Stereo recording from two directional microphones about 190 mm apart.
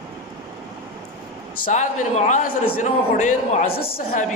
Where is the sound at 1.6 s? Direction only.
40° left (ahead or behind).